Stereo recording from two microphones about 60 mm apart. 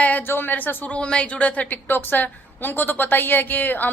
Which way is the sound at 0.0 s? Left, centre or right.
Left.